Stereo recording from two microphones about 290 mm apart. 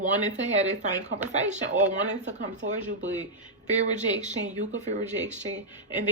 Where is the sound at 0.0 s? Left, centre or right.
Right.